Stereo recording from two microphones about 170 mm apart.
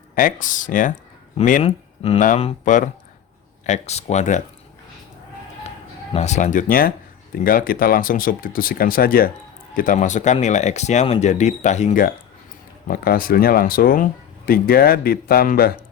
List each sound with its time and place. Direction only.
0.2 s speech: 50° left (ahead or behind)
1.6 s speech: 35° left (ahead or behind)
2.2 s speech: 45° left (ahead or behind)
6.1 s speech: 45° left (ahead or behind)
12.9 s speech: 60° left (ahead or behind)